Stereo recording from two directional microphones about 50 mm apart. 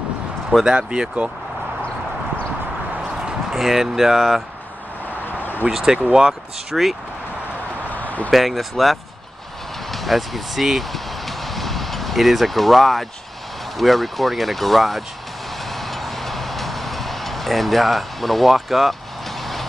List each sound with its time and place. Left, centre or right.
0.7 s speech: centre
3.2 s speech: centre
5.7 s speech: centre
7.9 s a sound: left
8.3 s speech: centre
9.8 s vehicle: centre
13.7 s speech: centre
15.7 s music: centre